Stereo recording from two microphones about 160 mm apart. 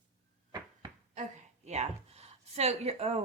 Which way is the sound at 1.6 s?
45° right (ahead or behind).